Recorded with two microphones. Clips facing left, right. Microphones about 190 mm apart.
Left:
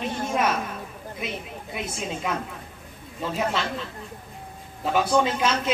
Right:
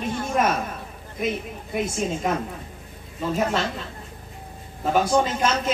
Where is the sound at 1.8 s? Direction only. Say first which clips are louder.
Right 6 dB; 45° right (ahead or behind).